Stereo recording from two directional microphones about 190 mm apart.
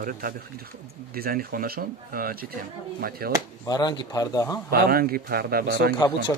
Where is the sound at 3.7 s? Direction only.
20° left (ahead or behind).